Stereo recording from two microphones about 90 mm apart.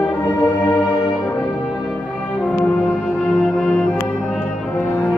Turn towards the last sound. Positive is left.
turn(degrees=5)  # may be behind; listen again after turning